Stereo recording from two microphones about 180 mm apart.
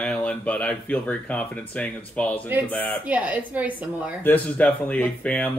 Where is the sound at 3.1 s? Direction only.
10° right (ahead or behind).